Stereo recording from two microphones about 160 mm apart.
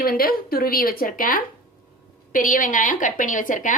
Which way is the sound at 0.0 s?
65° left (ahead or behind).